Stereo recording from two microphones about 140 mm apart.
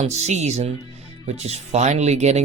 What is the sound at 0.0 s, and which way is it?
Speech, 55° right (ahead or behind).